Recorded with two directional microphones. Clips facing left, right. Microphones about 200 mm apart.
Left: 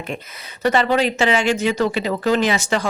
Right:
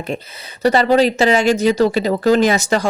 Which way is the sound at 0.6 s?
35° right (ahead or behind).